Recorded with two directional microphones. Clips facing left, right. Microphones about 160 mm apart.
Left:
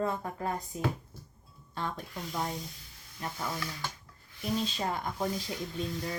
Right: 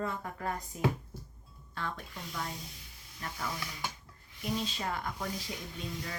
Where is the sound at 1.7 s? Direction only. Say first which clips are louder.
Left 3 dB; 25° left (ahead or behind).